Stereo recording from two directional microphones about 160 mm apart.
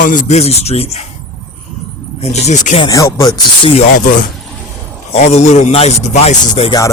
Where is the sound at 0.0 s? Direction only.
55° left (ahead or behind).